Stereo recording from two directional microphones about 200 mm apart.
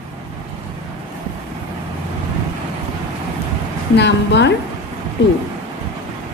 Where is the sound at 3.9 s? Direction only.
60° left (ahead or behind).